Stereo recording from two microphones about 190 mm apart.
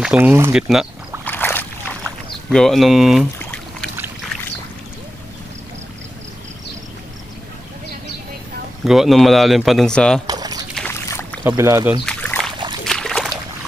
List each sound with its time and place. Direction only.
0.0 s speech: 5° right (ahead or behind)
1.2 s boat: 10° left (ahead or behind)
2.5 s speech: centre (ahead or behind)
3.3 s a sound: 5° left (ahead or behind)
8.8 s speech: centre (ahead or behind)
10.2 s a sound: 20° right (ahead or behind)
10.7 s boat: 10° left (ahead or behind)
11.4 s speech: 15° right (ahead or behind)
12.1 s a sound: 5° left (ahead or behind)